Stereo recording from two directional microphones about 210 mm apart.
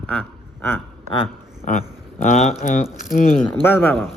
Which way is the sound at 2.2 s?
35° left (ahead or behind).